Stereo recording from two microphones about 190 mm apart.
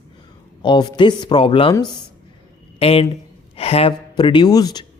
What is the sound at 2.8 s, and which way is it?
A man's voice, 30° left (ahead or behind).